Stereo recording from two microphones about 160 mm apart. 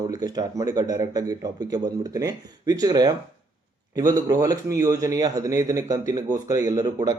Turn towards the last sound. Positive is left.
turn(degrees=-20)  # may be behind; listen again after turning